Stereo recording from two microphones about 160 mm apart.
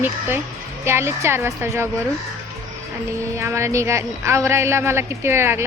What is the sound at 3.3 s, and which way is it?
A woman's voice, 15° right (ahead or behind).